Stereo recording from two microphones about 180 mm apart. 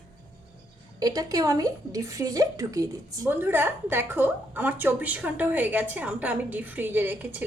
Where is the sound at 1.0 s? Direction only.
20° right (ahead or behind).